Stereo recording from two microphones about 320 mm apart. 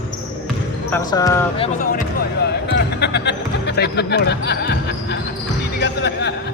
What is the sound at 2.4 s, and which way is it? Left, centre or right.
Speech, left.